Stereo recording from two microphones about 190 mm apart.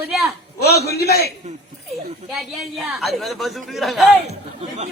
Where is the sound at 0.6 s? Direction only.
60° left (ahead or behind).